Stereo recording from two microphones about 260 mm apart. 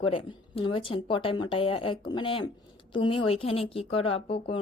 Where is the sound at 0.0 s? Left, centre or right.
Centre.